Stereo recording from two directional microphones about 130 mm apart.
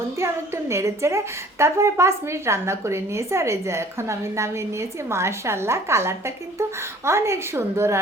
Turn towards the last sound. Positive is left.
turn(degrees=-20)  # may be behind; listen again after turning